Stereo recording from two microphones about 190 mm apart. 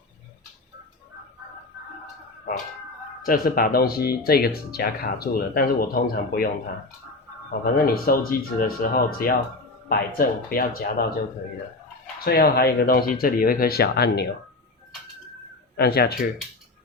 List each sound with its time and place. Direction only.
3.2 s speech: 50° left (ahead or behind)
7.6 s speech: 50° left (ahead or behind)
12.2 s speech: 55° left (ahead or behind)
15.8 s speech: 55° left (ahead or behind)